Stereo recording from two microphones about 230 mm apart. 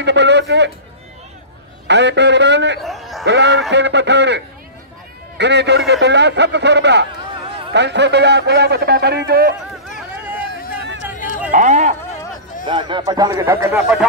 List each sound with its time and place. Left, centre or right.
0.0 s a man's voice: right
1.9 s a man's voice: right
2.8 s a sound: centre
3.3 s a man's voice: right
5.4 s a man's voice: right
11.1 s a sound: left
11.5 s speech: right
12.6 s speech: right